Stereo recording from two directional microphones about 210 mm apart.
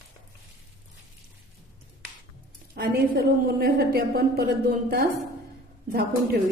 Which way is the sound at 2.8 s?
50° right (ahead or behind).